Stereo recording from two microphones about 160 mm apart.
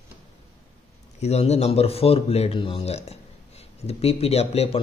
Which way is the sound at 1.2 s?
40° left (ahead or behind).